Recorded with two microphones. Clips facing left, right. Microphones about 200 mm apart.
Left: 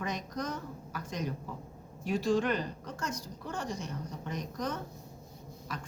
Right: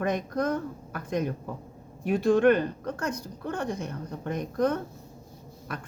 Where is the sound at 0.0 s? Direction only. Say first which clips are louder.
Right 9 dB; 55° right (ahead or behind).